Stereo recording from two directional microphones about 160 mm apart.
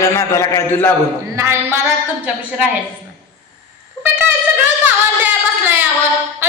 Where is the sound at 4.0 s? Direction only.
10° right (ahead or behind).